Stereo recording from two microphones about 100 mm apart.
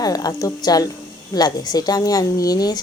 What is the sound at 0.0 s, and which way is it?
A woman's voice, 40° left (ahead or behind).